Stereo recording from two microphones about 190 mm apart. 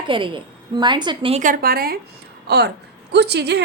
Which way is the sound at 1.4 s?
50° right (ahead or behind).